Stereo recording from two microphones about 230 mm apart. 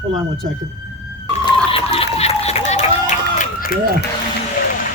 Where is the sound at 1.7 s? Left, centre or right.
Left.